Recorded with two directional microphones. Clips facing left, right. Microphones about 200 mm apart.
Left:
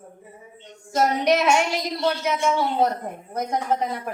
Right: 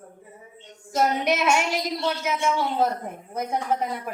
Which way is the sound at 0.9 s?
5° right (ahead or behind).